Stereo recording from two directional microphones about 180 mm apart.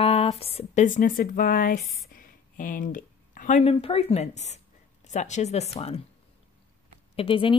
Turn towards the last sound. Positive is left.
turn(degrees=30)  # may be behind; listen again after turning